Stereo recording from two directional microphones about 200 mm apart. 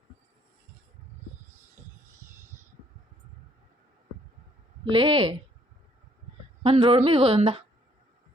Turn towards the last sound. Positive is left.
turn(degrees=-30)  # may be behind; listen again after turning